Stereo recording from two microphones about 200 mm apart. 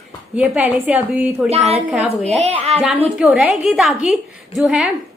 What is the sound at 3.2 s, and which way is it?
A woman's voice, 5° right (ahead or behind).